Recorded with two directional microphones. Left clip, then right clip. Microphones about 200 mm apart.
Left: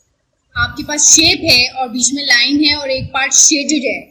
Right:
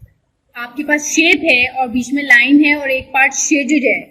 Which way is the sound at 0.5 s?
40° right (ahead or behind).